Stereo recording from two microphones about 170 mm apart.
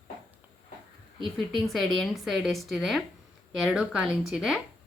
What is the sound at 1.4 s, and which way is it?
Speech, centre (ahead or behind).